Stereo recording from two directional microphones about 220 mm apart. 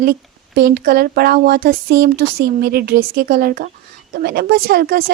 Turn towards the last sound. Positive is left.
turn(degrees=-45)  # may be behind; listen again after turning